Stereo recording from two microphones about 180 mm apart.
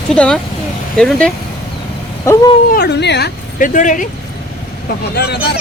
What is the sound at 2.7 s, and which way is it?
Speech, 65° left (ahead or behind).